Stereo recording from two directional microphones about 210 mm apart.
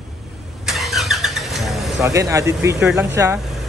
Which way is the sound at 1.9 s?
15° right (ahead or behind).